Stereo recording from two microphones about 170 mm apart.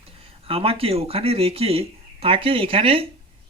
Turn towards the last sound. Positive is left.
turn(degrees=-35)  # may be behind; listen again after turning